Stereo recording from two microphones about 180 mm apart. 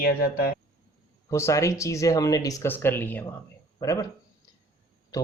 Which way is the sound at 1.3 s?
15° left (ahead or behind).